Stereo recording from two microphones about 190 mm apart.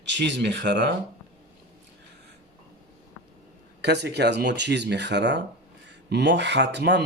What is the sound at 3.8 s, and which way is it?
Speech, 60° right (ahead or behind).